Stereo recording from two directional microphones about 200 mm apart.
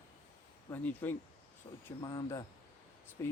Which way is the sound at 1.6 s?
20° left (ahead or behind).